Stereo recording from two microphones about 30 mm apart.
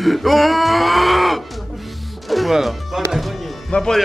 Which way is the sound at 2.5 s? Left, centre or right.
Centre.